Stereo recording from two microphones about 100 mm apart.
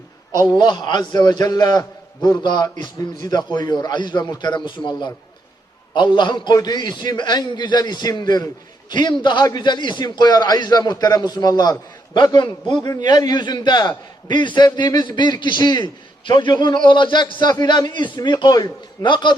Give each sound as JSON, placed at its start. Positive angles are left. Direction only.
{"t": 0.5, "sound": "a man's voice", "side_deg": 45}